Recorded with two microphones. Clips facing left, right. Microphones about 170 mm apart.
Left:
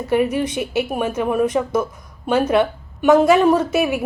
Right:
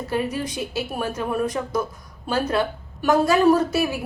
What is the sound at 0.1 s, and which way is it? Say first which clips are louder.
A woman's voice: left 8 dB; 20° left (ahead or behind).